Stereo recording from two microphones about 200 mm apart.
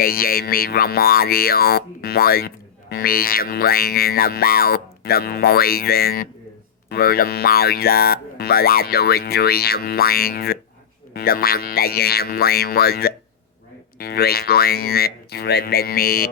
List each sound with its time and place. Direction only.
0.0 s speech: 45° left (ahead or behind)